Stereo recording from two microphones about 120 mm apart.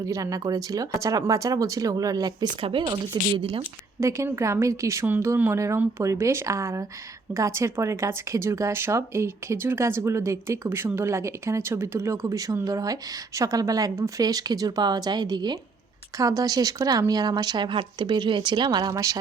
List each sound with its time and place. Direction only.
0.0 s speech: 30° right (ahead or behind)
2.6 s speech: 50° right (ahead or behind)
3.6 s speech: 25° right (ahead or behind)